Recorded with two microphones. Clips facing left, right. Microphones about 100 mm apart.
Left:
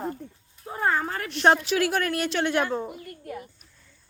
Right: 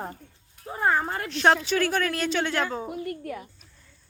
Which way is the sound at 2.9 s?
70° right (ahead or behind).